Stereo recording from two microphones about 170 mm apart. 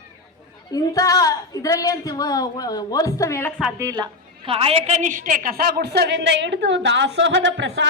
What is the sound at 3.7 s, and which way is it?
A woman's voice, 20° right (ahead or behind).